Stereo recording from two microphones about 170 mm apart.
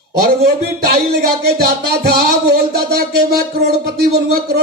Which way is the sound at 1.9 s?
70° right (ahead or behind).